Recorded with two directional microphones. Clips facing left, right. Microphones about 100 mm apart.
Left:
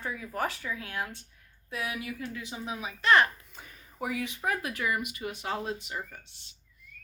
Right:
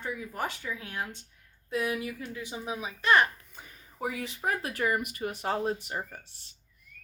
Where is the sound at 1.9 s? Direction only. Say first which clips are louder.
Right 2 dB; 25° right (ahead or behind).